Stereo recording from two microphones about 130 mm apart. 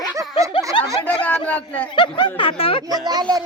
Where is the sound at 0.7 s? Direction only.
40° left (ahead or behind).